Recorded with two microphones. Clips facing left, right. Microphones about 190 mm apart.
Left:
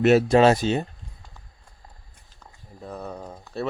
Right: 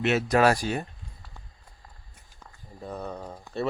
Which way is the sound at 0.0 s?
40° left (ahead or behind).